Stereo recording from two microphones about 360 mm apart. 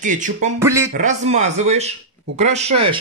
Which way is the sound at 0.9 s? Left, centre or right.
Centre.